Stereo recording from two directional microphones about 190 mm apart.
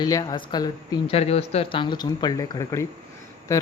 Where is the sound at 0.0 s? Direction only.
20° left (ahead or behind).